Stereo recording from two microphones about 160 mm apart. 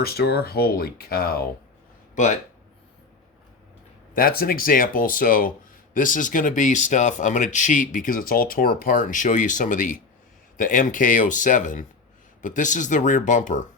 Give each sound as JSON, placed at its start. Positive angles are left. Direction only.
{"t": 0.0, "sound": "speech", "side_deg": 80}
{"t": 2.1, "sound": "speech", "side_deg": 50}
{"t": 4.1, "sound": "speech", "side_deg": 65}